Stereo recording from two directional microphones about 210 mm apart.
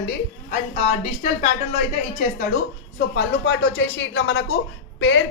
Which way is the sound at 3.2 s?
60° left (ahead or behind).